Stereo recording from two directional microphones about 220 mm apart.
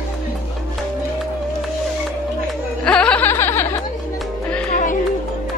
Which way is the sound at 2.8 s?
5° left (ahead or behind).